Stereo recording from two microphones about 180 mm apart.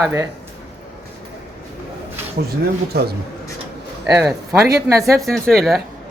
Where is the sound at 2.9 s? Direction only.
65° right (ahead or behind).